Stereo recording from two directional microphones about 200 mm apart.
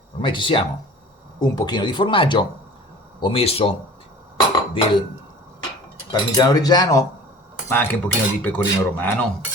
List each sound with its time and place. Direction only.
0.2 s speech: 25° left (ahead or behind)
4.7 s speech: 25° left (ahead or behind)
6.1 s speech: 20° left (ahead or behind)